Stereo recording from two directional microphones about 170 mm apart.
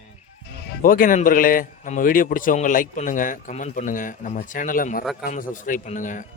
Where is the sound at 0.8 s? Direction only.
55° left (ahead or behind).